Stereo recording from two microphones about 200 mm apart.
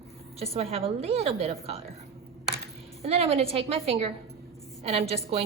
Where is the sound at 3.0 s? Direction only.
30° right (ahead or behind).